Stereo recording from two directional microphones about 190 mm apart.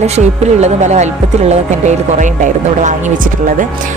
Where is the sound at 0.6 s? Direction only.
35° right (ahead or behind).